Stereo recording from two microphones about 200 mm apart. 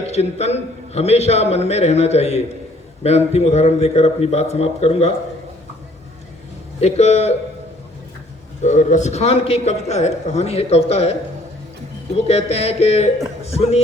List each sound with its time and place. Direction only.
0.0 s a man's voice: 30° left (ahead or behind)
6.7 s a man's voice: 35° left (ahead or behind)
8.6 s a man's voice: 35° left (ahead or behind)